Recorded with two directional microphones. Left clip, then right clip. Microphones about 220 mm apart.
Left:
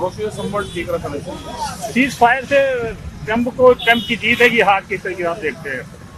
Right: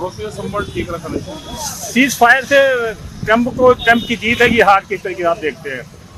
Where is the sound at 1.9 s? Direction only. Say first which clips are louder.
Right 4 dB; 45° right (ahead or behind).